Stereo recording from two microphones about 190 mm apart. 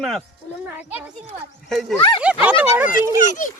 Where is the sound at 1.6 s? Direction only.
Centre (ahead or behind).